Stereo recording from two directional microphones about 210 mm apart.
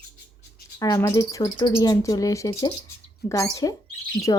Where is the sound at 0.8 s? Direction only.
15° left (ahead or behind).